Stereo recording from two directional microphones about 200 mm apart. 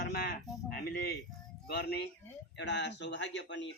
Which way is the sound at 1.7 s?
55° left (ahead or behind).